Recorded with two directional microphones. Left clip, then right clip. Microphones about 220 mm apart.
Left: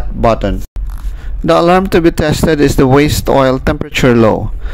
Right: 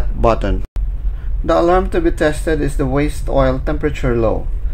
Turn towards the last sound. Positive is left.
turn(degrees=40)  # may be behind; listen again after turning